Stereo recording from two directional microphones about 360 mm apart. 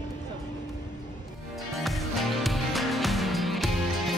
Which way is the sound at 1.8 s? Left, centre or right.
Centre.